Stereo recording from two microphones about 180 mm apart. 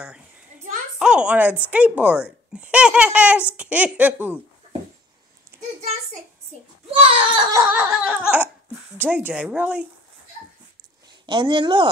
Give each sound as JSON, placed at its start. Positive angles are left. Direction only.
{"t": 0.9, "sound": "speech", "side_deg": -5}
{"t": 5.5, "sound": "a sound", "side_deg": -10}
{"t": 6.9, "sound": "speech", "side_deg": -30}
{"t": 7.5, "sound": "speech", "side_deg": -10}
{"t": 11.2, "sound": "speech", "side_deg": -25}